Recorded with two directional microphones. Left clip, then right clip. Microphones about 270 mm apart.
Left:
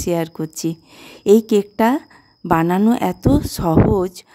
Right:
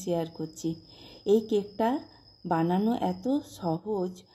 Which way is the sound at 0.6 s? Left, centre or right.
Left.